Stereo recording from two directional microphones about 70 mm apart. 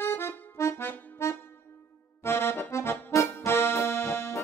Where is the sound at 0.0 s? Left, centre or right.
Left.